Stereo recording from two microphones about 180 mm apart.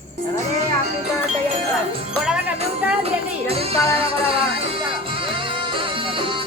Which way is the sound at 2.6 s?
35° right (ahead or behind).